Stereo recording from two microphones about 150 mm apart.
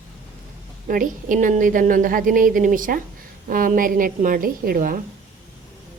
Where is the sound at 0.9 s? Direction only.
65° right (ahead or behind).